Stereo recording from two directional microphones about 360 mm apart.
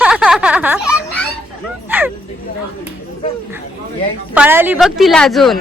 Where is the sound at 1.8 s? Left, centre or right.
Centre.